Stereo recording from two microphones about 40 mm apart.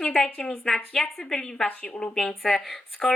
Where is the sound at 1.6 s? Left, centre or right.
Left.